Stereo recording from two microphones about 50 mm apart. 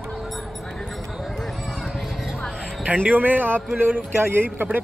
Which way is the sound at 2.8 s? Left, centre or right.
Right.